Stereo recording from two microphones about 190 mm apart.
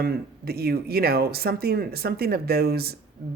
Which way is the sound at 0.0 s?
55° right (ahead or behind).